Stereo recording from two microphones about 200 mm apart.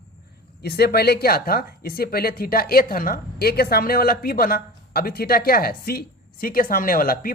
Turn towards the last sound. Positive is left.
turn(degrees=45)  # may be behind; listen again after turning